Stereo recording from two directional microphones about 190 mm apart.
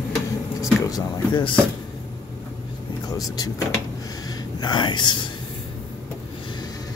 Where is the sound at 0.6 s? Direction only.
20° left (ahead or behind).